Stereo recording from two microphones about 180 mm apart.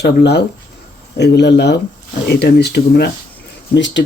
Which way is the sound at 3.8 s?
85° left.